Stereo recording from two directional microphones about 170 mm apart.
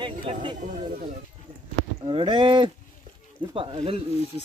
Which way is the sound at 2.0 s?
30° right (ahead or behind).